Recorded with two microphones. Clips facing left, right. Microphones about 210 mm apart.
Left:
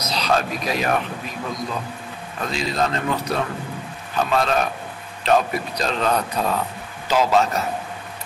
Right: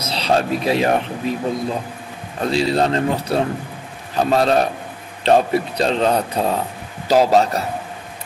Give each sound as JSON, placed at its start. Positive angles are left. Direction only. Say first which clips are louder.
{"t": 0.0, "sound": "speech", "louder": "right 3 dB", "side_deg": -30}